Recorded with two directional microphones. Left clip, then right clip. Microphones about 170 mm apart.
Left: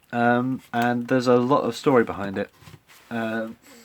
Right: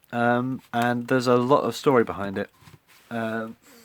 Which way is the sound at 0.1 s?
30° right (ahead or behind).